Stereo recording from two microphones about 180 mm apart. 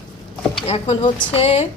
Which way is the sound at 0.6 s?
35° left (ahead or behind).